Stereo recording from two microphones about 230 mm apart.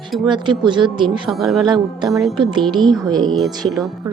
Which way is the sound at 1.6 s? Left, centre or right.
Centre.